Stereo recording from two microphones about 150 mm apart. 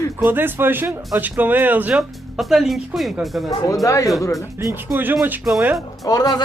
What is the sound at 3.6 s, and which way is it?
Speech, 20° left (ahead or behind).